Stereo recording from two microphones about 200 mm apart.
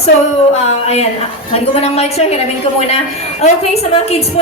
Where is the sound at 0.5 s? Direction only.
30° left (ahead or behind).